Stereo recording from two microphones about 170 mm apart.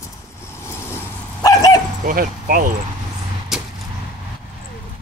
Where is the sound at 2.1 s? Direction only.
55° right (ahead or behind).